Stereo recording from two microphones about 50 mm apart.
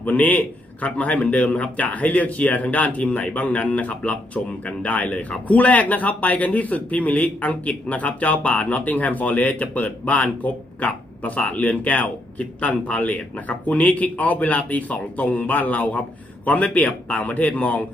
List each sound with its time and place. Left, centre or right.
0.0 s a man's voice: left